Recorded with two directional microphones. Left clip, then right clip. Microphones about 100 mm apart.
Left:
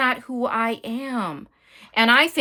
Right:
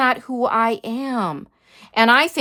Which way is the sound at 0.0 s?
40° right (ahead or behind).